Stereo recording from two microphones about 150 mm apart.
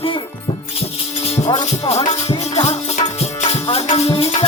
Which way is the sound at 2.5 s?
40° left (ahead or behind).